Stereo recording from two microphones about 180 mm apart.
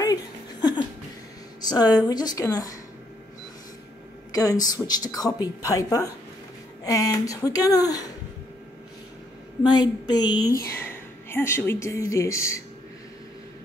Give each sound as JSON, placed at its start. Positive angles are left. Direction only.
{"t": 0.0, "sound": "a sound", "side_deg": 20}
{"t": 1.6, "sound": "a woman's voice", "side_deg": 20}
{"t": 4.3, "sound": "a woman's voice", "side_deg": 20}
{"t": 9.6, "sound": "a woman's voice", "side_deg": 20}
{"t": 10.8, "sound": "speech", "side_deg": 10}